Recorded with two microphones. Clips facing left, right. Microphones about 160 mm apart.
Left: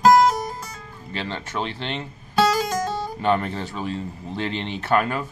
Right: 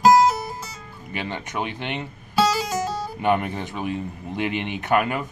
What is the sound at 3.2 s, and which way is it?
Speech, 15° right (ahead or behind).